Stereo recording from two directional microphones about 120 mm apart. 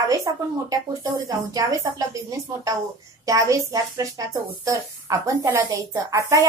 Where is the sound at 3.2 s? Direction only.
30° right (ahead or behind).